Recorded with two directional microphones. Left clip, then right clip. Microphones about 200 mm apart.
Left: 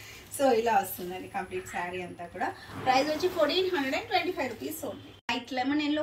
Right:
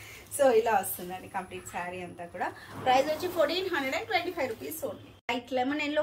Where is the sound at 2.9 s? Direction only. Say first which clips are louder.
Even; 35° right (ahead or behind).